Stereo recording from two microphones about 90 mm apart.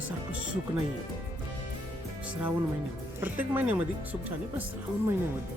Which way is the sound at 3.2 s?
20° right (ahead or behind).